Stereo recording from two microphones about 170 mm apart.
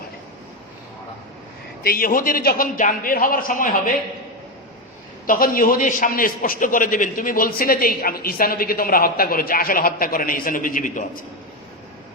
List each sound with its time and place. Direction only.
1.8 s a man's voice: 60° left (ahead or behind)
5.2 s a man's voice: 55° left (ahead or behind)